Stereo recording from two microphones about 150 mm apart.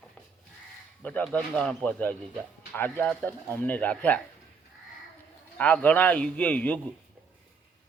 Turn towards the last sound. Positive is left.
turn(degrees=10)  # may be behind; listen again after turning